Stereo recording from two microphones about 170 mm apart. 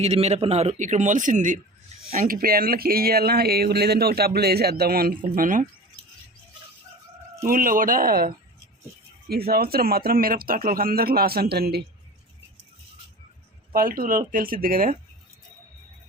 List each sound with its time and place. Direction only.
0.0 s a man's voice: 40° right (ahead or behind)
7.4 s speech: 55° right (ahead or behind)
13.7 s speech: 55° right (ahead or behind)